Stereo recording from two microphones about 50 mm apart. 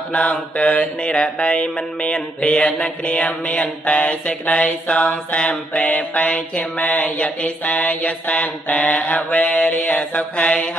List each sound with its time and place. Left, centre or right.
0.1 s mantra: left
5.4 s mantra: centre